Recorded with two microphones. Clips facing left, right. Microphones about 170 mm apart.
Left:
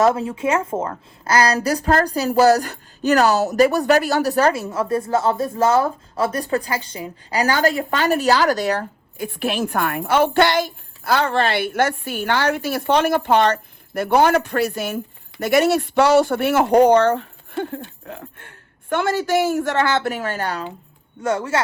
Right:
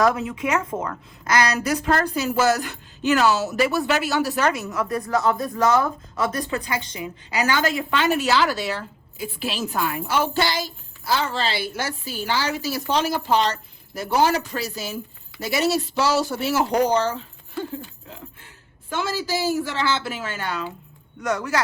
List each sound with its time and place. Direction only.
0.0 s a woman's voice: 30° left (ahead or behind)
9.2 s speech: 60° left (ahead or behind)
20.2 s a woman's voice: 40° left (ahead or behind)
21.2 s speech: 30° left (ahead or behind)